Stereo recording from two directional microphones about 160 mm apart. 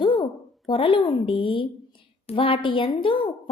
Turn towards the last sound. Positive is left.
turn(degrees=30)  # may be behind; listen again after turning